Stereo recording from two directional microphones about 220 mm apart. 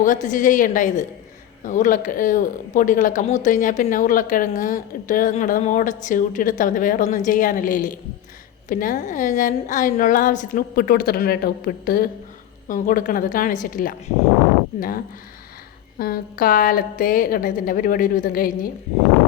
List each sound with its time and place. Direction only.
0.0 s speech: 35° left (ahead or behind)